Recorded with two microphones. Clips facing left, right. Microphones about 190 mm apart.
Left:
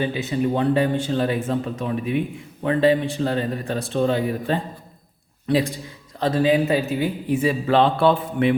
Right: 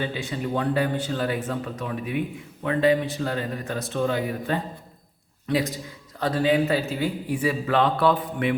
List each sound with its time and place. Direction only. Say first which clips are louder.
0.0 s a man's voice: left 6 dB; 20° left (ahead or behind)